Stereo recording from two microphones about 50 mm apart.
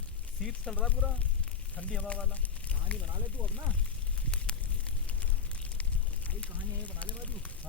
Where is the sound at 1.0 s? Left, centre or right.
Left.